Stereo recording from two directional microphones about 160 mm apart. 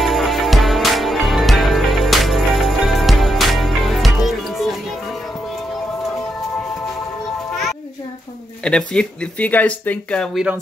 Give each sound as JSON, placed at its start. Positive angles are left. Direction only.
{"t": 0.0, "sound": "music", "side_deg": 0}
{"t": 8.6, "sound": "speech", "side_deg": 5}